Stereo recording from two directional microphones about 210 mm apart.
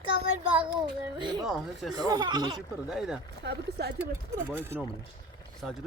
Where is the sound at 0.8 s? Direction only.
20° right (ahead or behind).